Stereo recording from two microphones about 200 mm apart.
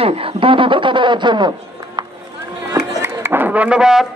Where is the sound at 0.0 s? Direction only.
30° right (ahead or behind).